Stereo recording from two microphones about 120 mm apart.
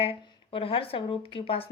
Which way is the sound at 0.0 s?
50° left (ahead or behind).